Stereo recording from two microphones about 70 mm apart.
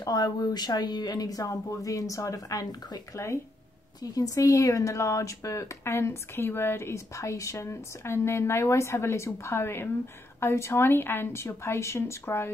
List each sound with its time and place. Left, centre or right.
0.0 s speech: left
4.0 s speech: left